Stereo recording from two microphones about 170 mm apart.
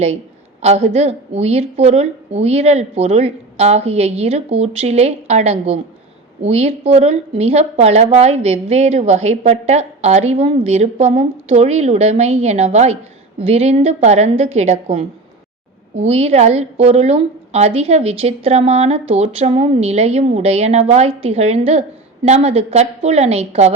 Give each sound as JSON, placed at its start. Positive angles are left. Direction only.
{"t": 0.6, "sound": "a woman's voice", "side_deg": -40}